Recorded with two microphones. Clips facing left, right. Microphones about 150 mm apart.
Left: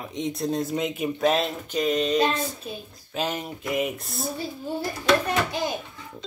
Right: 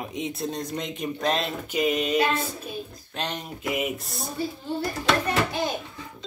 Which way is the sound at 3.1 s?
5° left (ahead or behind).